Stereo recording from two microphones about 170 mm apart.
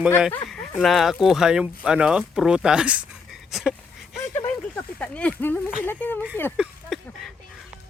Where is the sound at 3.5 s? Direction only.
Centre (ahead or behind).